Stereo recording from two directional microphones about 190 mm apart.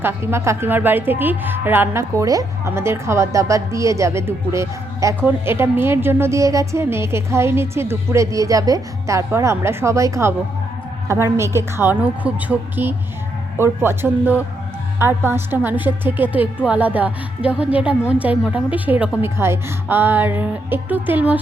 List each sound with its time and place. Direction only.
0.0 s a woman's voice: 15° right (ahead or behind)